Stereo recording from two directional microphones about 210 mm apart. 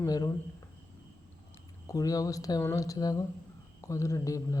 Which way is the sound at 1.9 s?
15° left (ahead or behind).